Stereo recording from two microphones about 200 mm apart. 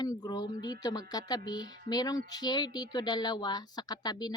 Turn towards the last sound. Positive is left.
turn(degrees=20)  # may be behind; listen again after turning